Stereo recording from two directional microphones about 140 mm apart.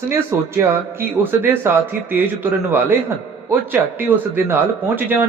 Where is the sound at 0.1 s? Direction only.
15° right (ahead or behind).